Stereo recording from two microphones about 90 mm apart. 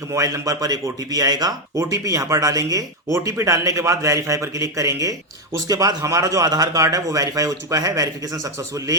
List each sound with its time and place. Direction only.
0.1 s a man's voice: 35° right (ahead or behind)